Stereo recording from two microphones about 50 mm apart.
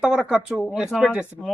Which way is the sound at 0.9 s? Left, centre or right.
Centre.